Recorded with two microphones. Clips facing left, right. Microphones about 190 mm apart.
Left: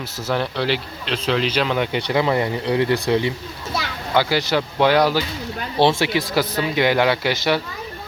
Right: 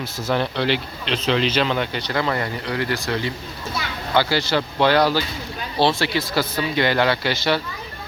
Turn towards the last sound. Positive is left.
turn(degrees=15)  # may be behind; listen again after turning